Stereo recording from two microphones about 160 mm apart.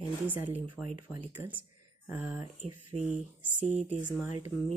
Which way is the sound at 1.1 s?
10° right (ahead or behind).